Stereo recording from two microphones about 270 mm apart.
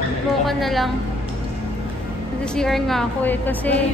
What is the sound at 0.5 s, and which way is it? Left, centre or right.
Speech, centre.